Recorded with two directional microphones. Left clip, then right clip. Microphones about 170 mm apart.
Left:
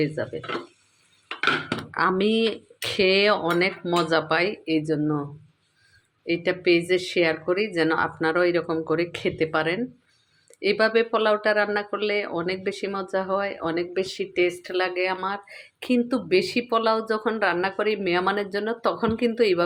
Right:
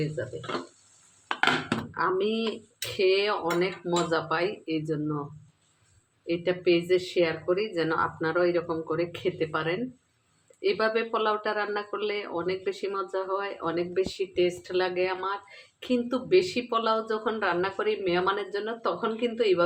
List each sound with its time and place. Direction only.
0.2 s speech: 35° left (ahead or behind)
1.9 s speech: 40° left (ahead or behind)
6.2 s speech: 35° left (ahead or behind)